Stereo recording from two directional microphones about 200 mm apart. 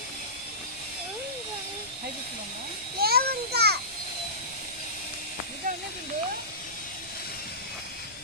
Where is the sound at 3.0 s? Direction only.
50° right (ahead or behind).